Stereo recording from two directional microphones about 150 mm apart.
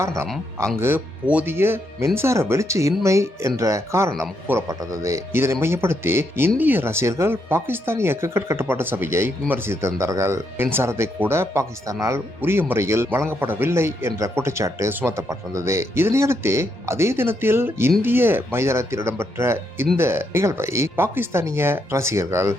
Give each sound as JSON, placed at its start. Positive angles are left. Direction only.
{"t": 0.8, "sound": "speech", "side_deg": -15}